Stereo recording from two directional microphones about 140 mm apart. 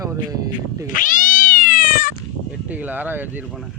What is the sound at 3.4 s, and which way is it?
Speech, centre (ahead or behind).